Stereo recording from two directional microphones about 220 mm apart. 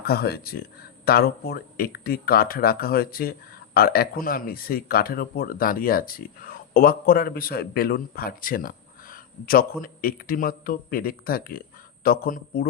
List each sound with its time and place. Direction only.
0.0 s speech: 45° left (ahead or behind)